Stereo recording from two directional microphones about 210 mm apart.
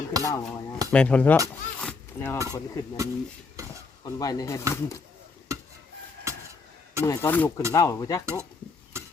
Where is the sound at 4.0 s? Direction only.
15° left (ahead or behind).